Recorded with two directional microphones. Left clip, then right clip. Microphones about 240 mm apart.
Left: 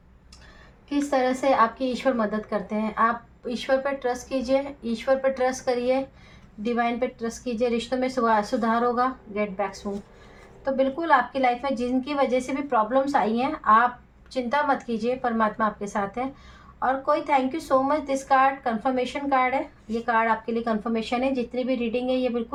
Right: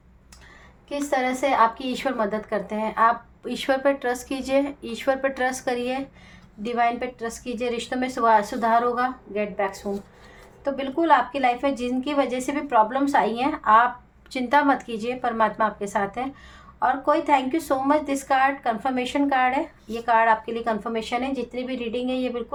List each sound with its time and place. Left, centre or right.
1.1 s speech: right